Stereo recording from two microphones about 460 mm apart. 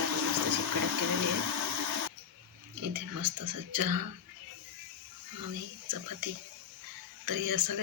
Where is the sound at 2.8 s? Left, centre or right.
Right.